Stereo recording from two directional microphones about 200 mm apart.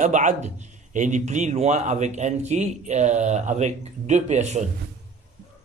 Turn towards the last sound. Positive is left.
turn(degrees=-35)  # may be behind; listen again after turning